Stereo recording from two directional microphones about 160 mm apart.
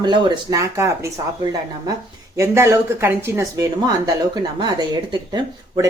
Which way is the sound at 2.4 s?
15° right (ahead or behind).